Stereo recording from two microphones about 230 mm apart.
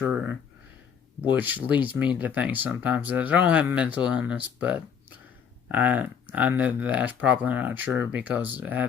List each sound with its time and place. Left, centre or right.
0.0 s speech: centre